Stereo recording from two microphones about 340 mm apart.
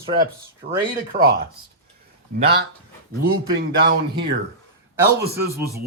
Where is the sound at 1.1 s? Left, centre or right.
Right.